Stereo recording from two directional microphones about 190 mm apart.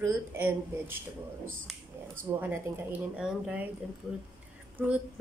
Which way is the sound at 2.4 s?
10° right (ahead or behind).